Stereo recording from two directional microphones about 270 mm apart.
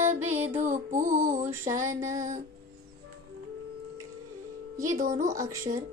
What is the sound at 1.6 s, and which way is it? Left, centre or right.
Speech, centre.